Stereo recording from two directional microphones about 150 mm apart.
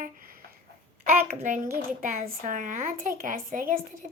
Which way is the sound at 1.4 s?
60° right (ahead or behind).